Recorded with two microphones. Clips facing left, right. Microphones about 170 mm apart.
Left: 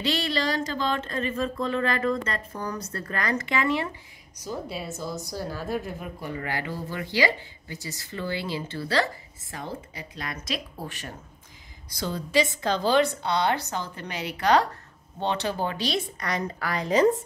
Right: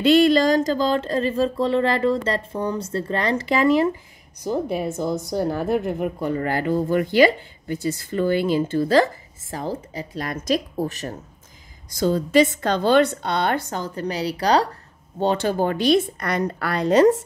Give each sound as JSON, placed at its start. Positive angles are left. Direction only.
{"t": 0.0, "sound": "speech", "side_deg": -50}
{"t": 4.5, "sound": "speech", "side_deg": -55}
{"t": 15.1, "sound": "a woman's voice", "side_deg": -45}